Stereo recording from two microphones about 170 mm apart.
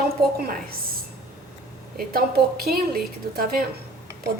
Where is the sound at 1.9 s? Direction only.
65° right (ahead or behind).